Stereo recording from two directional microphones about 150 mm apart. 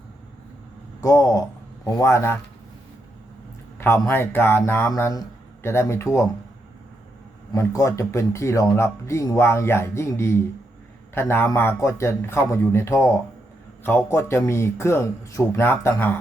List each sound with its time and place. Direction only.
1.0 s speech: 25° left (ahead or behind)
3.8 s speech: 15° left (ahead or behind)
7.5 s speech: 20° left (ahead or behind)